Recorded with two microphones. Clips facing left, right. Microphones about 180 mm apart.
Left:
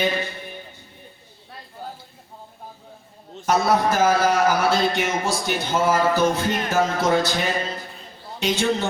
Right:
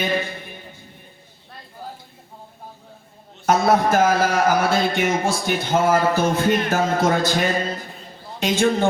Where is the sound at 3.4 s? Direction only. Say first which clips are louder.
Right 2 dB; 50° right (ahead or behind).